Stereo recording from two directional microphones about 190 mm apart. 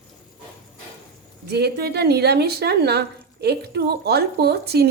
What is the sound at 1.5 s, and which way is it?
A woman's voice, 60° right (ahead or behind).